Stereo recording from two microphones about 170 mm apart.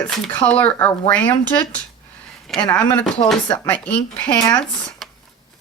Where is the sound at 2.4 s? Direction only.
5° left (ahead or behind).